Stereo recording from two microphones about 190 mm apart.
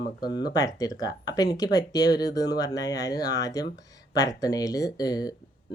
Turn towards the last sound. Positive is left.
turn(degrees=20)  # may be behind; listen again after turning